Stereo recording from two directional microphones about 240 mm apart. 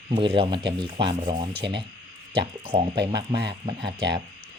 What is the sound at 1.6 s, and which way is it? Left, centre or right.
Speech, right.